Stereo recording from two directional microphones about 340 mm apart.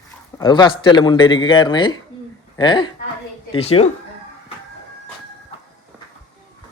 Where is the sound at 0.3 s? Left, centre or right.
Centre.